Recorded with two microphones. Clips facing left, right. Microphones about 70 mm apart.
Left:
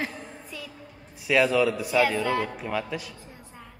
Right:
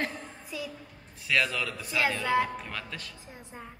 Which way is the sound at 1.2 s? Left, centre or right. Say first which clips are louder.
Left 8 dB; centre.